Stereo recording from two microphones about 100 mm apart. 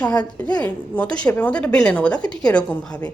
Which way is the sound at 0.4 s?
15° left (ahead or behind).